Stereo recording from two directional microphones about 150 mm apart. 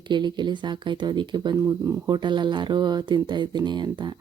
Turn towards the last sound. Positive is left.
turn(degrees=-30)  # may be behind; listen again after turning